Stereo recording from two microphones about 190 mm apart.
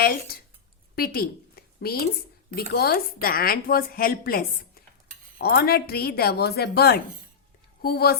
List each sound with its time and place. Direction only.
0.0 s a woman's voice: 55° left (ahead or behind)